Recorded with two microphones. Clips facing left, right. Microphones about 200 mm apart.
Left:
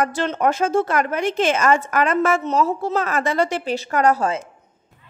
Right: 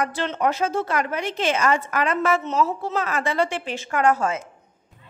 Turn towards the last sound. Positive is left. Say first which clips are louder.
# left 2 dB
turn(degrees=35)  # may be behind; listen again after turning